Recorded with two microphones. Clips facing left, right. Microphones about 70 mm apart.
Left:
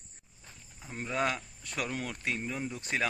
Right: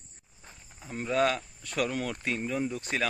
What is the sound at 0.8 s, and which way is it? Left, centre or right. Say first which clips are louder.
Speech: right 5 dB; centre.